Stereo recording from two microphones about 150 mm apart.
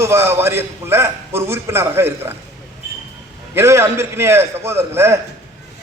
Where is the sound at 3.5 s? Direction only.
20° right (ahead or behind).